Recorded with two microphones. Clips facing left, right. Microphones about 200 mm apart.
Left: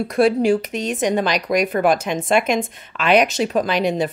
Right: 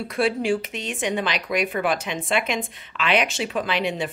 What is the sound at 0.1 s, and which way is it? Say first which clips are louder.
Speech: left 6 dB; 40° left (ahead or behind).